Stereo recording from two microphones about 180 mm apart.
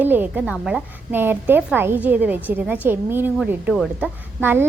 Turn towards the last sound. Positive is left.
turn(degrees=-10)  # may be behind; listen again after turning